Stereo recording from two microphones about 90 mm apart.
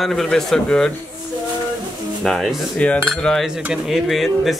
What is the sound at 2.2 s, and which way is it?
Speech, centre (ahead or behind).